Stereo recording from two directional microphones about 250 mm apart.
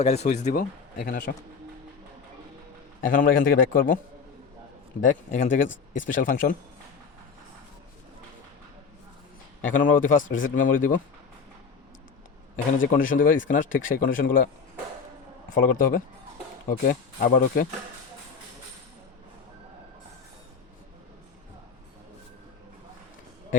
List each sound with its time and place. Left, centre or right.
0.0 s speech: left
3.0 s a man's voice: left
5.0 s a man's voice: left
9.7 s a man's voice: left
12.8 s a man's voice: left
15.5 s a man's voice: left